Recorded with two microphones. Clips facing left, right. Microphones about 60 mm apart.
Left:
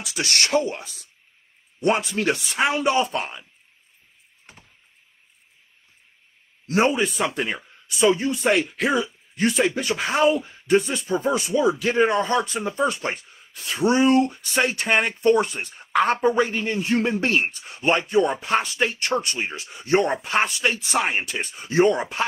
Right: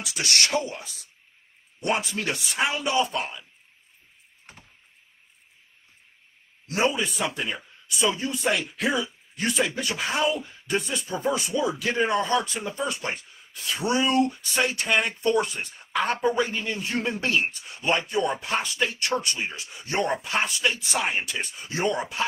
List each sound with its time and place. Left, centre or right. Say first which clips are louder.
0.0 s speech: left 1 dB; left
6.7 s speech: left 5 dB; left